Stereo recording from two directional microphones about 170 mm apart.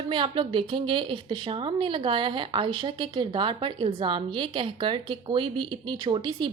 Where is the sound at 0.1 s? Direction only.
30° right (ahead or behind).